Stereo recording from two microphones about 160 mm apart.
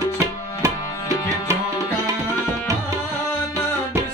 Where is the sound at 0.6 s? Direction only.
20° right (ahead or behind).